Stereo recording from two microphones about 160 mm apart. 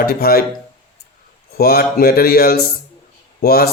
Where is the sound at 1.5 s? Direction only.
75° left (ahead or behind).